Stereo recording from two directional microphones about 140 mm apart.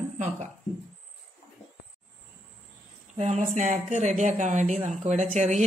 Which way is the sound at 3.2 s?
65° right (ahead or behind).